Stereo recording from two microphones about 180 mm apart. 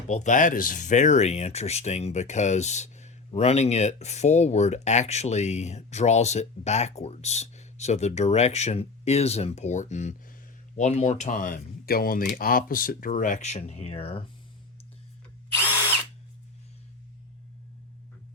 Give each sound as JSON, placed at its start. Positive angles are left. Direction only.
{"t": 0.1, "sound": "speech", "side_deg": 45}